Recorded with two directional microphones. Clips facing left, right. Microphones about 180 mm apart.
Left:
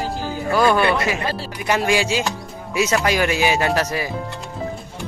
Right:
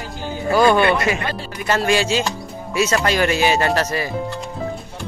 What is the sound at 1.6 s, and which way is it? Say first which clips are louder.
Speech: right 1 dB; 15° left (ahead or behind).